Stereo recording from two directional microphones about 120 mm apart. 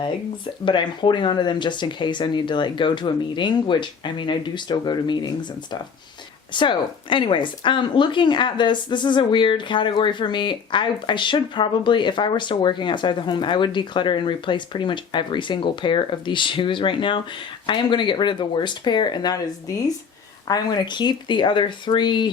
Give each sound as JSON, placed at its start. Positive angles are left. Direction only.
{"t": 0.6, "sound": "speech", "side_deg": 40}
{"t": 6.5, "sound": "speech", "side_deg": 40}